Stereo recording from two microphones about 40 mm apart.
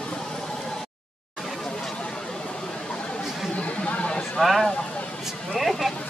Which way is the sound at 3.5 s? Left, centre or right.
Left.